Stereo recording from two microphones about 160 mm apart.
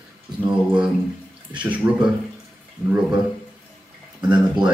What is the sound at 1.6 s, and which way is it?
Speech, 5° right (ahead or behind).